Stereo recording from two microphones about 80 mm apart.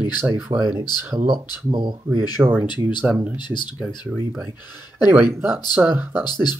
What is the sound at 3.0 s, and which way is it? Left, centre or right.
Speech, centre.